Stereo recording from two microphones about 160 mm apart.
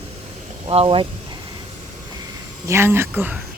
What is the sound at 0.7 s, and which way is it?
Speech, 35° right (ahead or behind).